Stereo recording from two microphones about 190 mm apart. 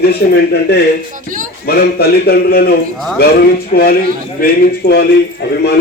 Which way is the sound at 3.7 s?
40° left (ahead or behind).